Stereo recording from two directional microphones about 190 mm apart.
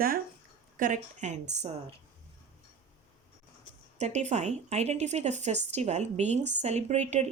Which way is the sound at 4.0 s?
40° right (ahead or behind).